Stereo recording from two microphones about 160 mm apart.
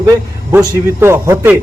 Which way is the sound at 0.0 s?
20° right (ahead or behind).